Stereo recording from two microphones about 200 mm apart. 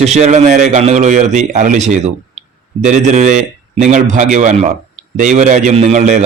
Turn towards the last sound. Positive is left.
turn(degrees=-35)  # may be behind; listen again after turning